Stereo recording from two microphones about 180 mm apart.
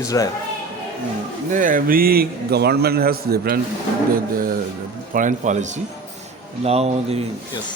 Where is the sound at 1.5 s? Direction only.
45° right (ahead or behind).